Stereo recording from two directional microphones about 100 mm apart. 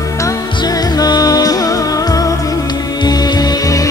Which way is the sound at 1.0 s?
40° left (ahead or behind).